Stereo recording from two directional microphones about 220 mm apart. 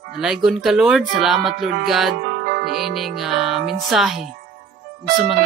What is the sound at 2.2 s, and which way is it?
Music, 45° right (ahead or behind).